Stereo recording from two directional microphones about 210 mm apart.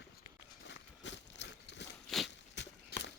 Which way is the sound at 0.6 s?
60° left (ahead or behind).